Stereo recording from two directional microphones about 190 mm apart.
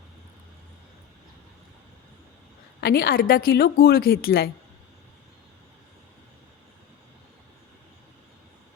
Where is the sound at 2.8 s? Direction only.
50° left (ahead or behind).